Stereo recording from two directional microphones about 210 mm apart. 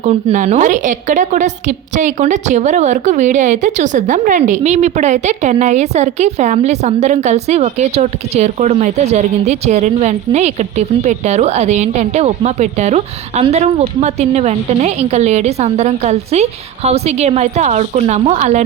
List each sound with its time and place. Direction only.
0.0 s a woman's voice: 30° right (ahead or behind)